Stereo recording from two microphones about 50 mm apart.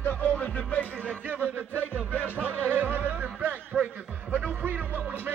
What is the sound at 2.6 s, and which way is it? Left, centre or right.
Music, right.